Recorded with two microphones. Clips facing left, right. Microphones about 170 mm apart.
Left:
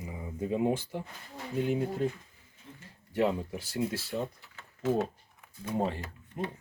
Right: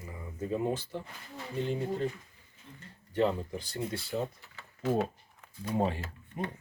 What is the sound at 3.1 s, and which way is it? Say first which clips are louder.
Speech: even; 10° left (ahead or behind).